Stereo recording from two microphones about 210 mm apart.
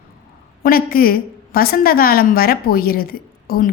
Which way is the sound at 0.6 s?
45° left (ahead or behind).